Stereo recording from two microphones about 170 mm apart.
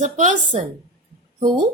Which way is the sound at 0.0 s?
45° right (ahead or behind).